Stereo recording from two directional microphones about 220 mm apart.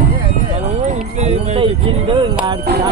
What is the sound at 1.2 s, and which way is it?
Music, 30° right (ahead or behind).